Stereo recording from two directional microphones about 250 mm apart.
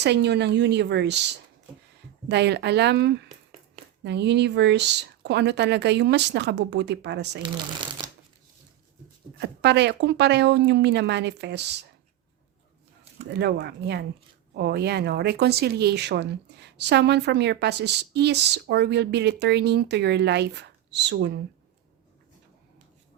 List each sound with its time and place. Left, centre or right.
0.0 s speech: right
2.3 s speech: right
7.4 s speech: centre
9.4 s speech: right
13.3 s speech: right